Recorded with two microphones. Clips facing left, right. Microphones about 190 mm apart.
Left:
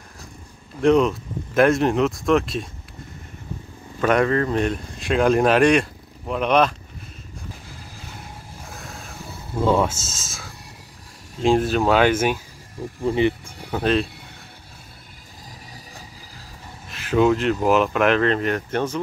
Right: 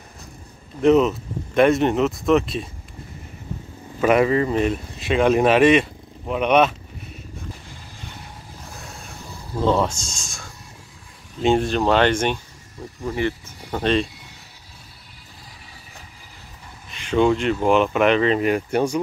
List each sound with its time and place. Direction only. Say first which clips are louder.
0.7 s speech: right 1 dB; 5° right (ahead or behind)
4.0 s speech: right 2 dB; 5° right (ahead or behind)
8.7 s a sound: left 2 dB; centre (ahead or behind)
9.6 s speech: even; 5° left (ahead or behind)
13.0 s speech: left 4 dB; 20° left (ahead or behind)
13.7 s speech: even; 5° left (ahead or behind)
16.9 s speech: even; 5° left (ahead or behind)